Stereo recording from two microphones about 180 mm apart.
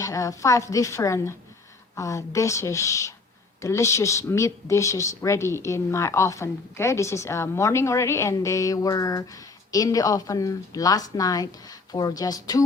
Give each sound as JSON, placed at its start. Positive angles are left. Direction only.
{"t": 0.0, "sound": "speech", "side_deg": 20}